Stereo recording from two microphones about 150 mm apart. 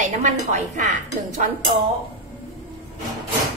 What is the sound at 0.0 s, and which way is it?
Speech, 50° right (ahead or behind).